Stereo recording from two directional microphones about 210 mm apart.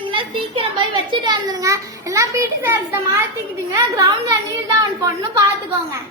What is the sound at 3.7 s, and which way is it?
Speech, 15° right (ahead or behind).